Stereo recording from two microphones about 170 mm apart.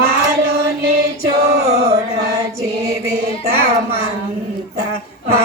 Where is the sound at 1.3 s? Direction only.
65° right (ahead or behind).